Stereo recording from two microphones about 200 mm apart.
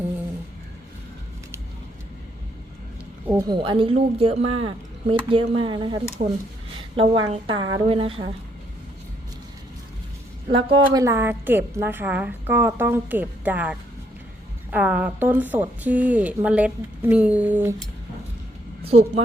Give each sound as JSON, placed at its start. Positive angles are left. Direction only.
{"t": 3.2, "sound": "speech", "side_deg": -15}
{"t": 6.2, "sound": "a woman's voice", "side_deg": -35}
{"t": 10.7, "sound": "a woman's voice", "side_deg": -20}
{"t": 18.9, "sound": "a woman's voice", "side_deg": -30}